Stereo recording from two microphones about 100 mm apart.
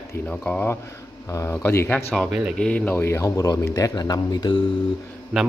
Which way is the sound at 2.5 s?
10° left (ahead or behind).